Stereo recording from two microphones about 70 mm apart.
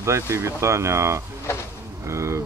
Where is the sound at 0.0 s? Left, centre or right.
Right.